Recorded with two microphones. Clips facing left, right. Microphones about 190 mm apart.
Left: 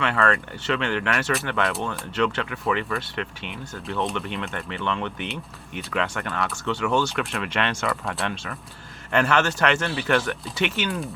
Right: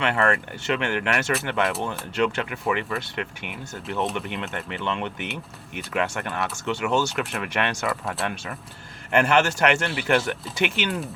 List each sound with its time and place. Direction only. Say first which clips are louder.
0.0 s speech: even; 20° right (ahead or behind); by 8.3 s centre (ahead or behind)
9.1 s speech: right 1 dB; 15° right (ahead or behind)